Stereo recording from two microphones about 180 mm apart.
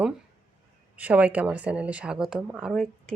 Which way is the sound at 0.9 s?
10° right (ahead or behind).